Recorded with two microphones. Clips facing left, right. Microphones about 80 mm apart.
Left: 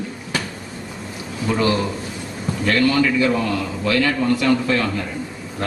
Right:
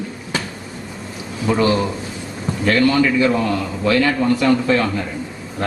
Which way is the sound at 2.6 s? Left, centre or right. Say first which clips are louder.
Right 2 dB; right.